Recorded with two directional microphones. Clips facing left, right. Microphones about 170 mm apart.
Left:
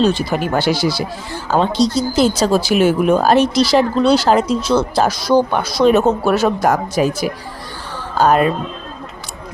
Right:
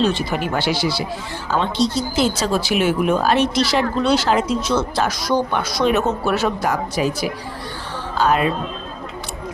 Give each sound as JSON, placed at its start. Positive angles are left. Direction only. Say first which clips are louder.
{"t": 0.0, "sound": "speech", "louder": "left 4 dB", "side_deg": 40}